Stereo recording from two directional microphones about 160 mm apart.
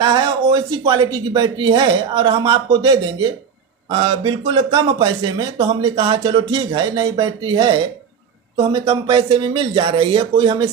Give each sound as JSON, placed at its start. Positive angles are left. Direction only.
{"t": 0.0, "sound": "speech", "side_deg": -30}